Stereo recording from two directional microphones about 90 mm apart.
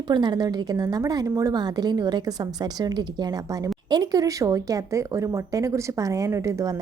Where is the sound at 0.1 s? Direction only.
55° right (ahead or behind).